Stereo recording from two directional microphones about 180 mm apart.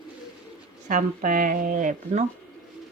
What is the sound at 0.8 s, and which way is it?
Speech, 45° right (ahead or behind).